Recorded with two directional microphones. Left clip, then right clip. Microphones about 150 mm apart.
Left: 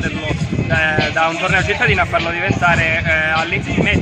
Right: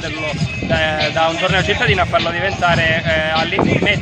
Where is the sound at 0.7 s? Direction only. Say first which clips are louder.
Left 1 dB; 25° right (ahead or behind).